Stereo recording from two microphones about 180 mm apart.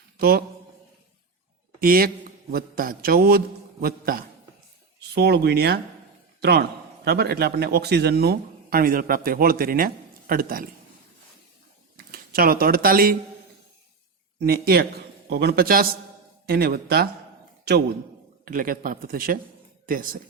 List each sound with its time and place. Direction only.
0.2 s a man's voice: 60° right (ahead or behind)
1.8 s a man's voice: 55° right (ahead or behind)
4.9 s a man's voice: 65° right (ahead or behind)
11.9 s speech: 55° right (ahead or behind)
14.3 s a man's voice: 60° right (ahead or behind)
18.4 s a man's voice: 50° right (ahead or behind)
19.8 s a sound: 50° right (ahead or behind)